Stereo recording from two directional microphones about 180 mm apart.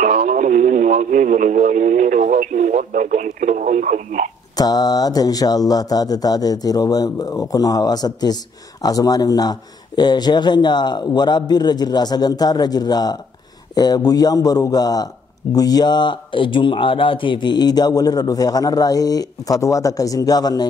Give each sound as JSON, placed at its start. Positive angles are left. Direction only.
{"t": 0.0, "sound": "speech", "side_deg": -45}
{"t": 4.6, "sound": "speech", "side_deg": 20}